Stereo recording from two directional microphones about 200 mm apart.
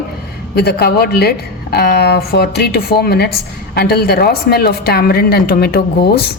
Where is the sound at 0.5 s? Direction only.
55° left (ahead or behind).